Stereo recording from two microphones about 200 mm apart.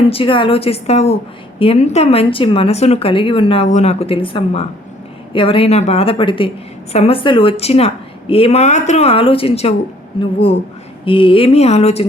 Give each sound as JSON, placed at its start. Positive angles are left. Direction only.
{"t": 0.0, "sound": "a woman's voice", "side_deg": 30}
{"t": 11.0, "sound": "a woman's voice", "side_deg": 25}